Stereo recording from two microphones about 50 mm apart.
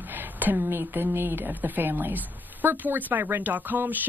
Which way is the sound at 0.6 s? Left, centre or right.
Right.